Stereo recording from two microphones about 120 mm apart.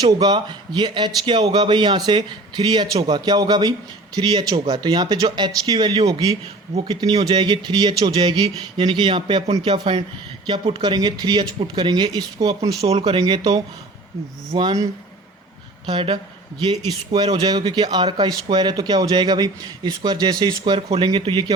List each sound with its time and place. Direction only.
0.0 s speech: 30° right (ahead or behind)
12.8 s speech: 55° right (ahead or behind); by 13.6 s 35° right (ahead or behind)
14.6 s speech: 35° right (ahead or behind)
15.9 s speech: 40° right (ahead or behind)
20.7 s a man's voice: 45° right (ahead or behind)